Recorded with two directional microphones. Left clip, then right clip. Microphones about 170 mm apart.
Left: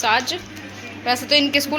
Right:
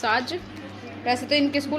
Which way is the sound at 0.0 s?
15° right (ahead or behind).